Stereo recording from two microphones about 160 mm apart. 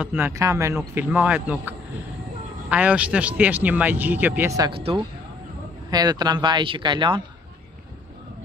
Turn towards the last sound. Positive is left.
turn(degrees=-30)  # may be behind; listen again after turning